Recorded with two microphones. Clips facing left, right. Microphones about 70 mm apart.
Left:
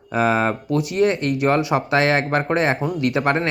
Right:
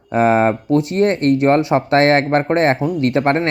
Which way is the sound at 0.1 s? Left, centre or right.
Right.